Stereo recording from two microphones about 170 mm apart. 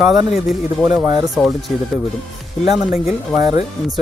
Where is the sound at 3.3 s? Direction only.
20° right (ahead or behind).